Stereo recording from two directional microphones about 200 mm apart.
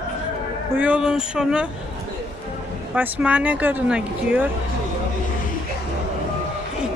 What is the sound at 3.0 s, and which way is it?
Speech, 5° right (ahead or behind).